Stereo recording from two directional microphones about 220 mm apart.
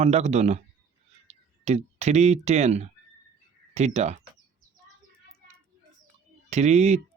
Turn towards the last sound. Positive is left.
turn(degrees=-30)  # may be behind; listen again after turning